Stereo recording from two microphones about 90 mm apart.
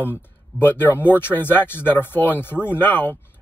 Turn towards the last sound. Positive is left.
turn(degrees=25)  # may be behind; listen again after turning